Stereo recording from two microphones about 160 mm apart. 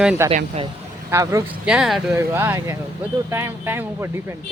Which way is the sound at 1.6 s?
5° right (ahead or behind).